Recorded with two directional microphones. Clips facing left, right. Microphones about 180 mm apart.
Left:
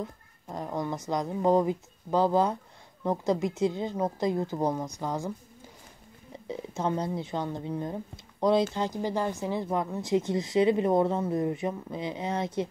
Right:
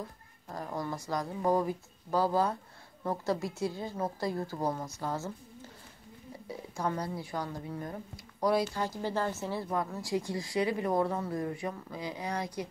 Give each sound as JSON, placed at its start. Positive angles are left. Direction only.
{"t": 0.5, "sound": "a woman's voice", "side_deg": 20}